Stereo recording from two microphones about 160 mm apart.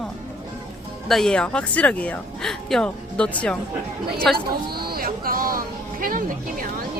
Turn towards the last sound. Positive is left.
turn(degrees=-60)  # may be behind; listen again after turning